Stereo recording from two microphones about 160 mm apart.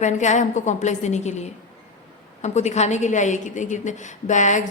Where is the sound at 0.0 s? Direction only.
50° left (ahead or behind).